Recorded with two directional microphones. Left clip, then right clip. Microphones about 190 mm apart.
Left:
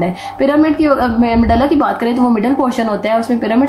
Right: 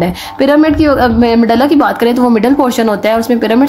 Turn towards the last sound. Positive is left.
turn(degrees=-45)  # may be behind; listen again after turning